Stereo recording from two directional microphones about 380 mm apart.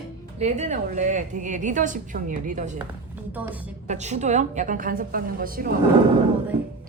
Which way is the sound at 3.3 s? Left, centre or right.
Centre.